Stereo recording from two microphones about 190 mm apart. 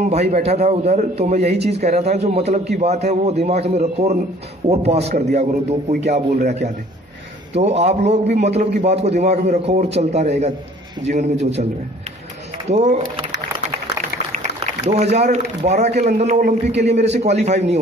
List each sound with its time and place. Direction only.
0.1 s a man's voice: 35° right (ahead or behind)
12.6 s speech: 35° right (ahead or behind)
14.9 s a man's voice: 35° right (ahead or behind)